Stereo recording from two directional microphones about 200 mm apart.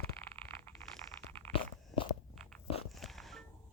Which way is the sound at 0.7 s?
10° left (ahead or behind).